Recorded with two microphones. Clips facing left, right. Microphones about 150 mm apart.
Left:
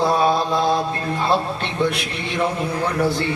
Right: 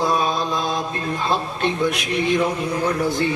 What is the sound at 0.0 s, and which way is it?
Mantra, 30° left (ahead or behind).